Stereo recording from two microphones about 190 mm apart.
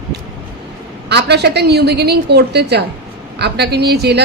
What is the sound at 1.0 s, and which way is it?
A woman's voice, 60° right (ahead or behind).